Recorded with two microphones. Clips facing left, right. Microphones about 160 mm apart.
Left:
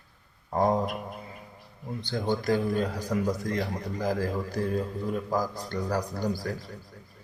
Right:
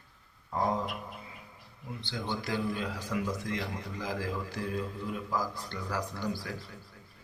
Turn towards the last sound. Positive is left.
turn(degrees=40)  # may be behind; listen again after turning